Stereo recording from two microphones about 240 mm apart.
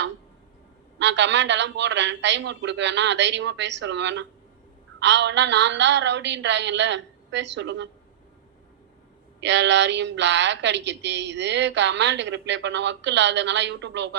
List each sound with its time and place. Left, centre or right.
0.9 s speech: right
9.4 s speech: right